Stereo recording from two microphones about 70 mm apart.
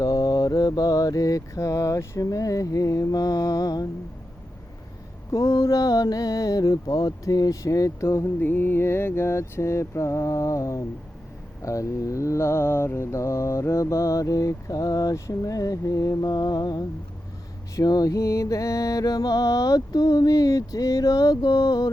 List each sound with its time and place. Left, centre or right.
0.0 s music: left
5.3 s music: left
8.4 s mantra: left
16.3 s mantra: left
17.7 s music: left